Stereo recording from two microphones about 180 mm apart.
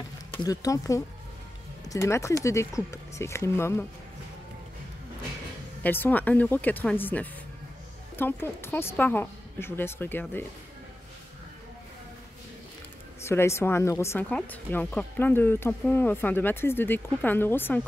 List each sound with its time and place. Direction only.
0.4 s speech: 20° left (ahead or behind)
5.8 s speech: 10° left (ahead or behind)
13.2 s speech: 15° left (ahead or behind)